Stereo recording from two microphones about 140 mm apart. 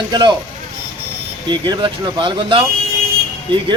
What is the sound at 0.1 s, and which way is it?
Speech, 35° right (ahead or behind).